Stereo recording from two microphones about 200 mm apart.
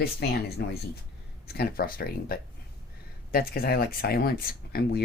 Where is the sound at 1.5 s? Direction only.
50° left (ahead or behind).